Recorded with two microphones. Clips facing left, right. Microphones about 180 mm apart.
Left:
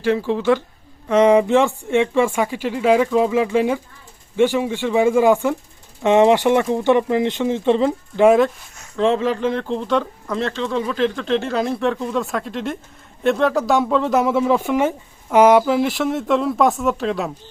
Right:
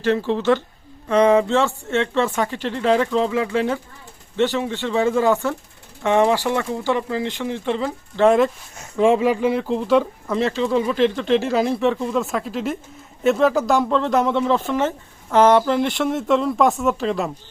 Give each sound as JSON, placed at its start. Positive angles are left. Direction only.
{"t": 0.0, "sound": "speech", "side_deg": 10}
{"t": 8.2, "sound": "speech", "side_deg": 0}
{"t": 9.0, "sound": "speech", "side_deg": -10}